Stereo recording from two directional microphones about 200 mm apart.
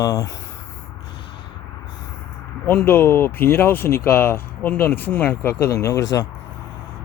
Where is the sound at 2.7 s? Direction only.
10° left (ahead or behind).